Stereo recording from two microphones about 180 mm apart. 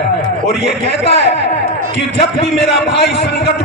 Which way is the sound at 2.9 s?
70° left (ahead or behind).